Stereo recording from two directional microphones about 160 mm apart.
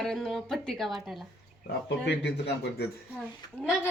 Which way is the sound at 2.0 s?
90° left.